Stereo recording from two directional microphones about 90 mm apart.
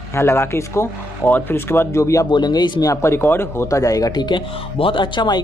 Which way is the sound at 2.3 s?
50° left (ahead or behind).